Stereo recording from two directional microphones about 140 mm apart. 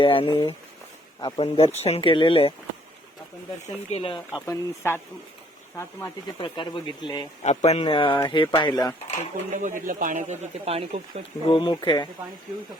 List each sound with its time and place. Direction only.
0.0 s speech: 40° left (ahead or behind)
3.9 s speech: 40° left (ahead or behind)
4.4 s speech: 20° left (ahead or behind)
6.4 s speech: 35° left (ahead or behind)
7.4 s speech: 50° left (ahead or behind); by 9.0 s 30° left (ahead or behind)
9.5 s speech: 65° right (ahead or behind); by 11.2 s 45° right (ahead or behind)
11.4 s speech: 35° left (ahead or behind)